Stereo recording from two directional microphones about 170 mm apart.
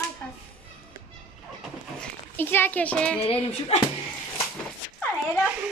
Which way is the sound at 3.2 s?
35° left (ahead or behind).